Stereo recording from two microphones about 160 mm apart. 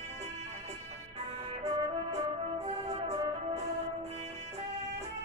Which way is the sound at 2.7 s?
40° right (ahead or behind).